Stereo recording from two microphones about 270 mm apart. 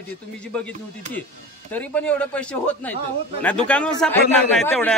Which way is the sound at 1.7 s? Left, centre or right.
Centre.